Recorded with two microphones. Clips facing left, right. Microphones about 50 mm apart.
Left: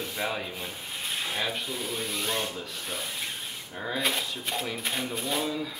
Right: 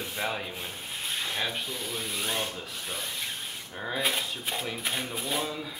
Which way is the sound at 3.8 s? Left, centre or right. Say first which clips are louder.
Even; centre.